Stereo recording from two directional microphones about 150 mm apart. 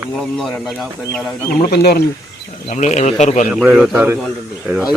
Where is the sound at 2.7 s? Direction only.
50° left (ahead or behind).